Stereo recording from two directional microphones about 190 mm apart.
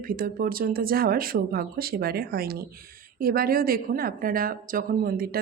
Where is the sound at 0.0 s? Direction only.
50° right (ahead or behind).